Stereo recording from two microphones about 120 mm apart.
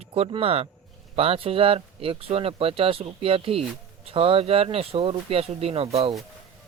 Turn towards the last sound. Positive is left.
turn(degrees=-60)  # may be behind; listen again after turning